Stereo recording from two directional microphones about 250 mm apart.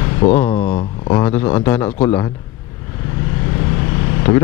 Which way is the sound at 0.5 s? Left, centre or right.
Left.